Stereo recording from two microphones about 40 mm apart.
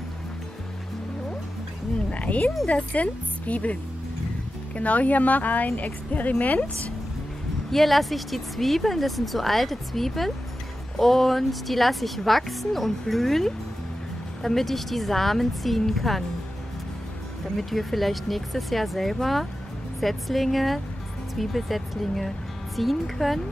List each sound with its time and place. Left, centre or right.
2.0 s a woman's voice: left
4.7 s a woman's voice: left
7.7 s speech: centre
17.6 s speech: centre